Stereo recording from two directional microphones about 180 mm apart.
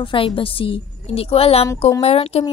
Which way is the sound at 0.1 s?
30° left (ahead or behind).